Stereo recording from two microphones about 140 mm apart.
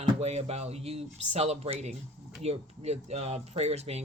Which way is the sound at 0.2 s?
50° right (ahead or behind).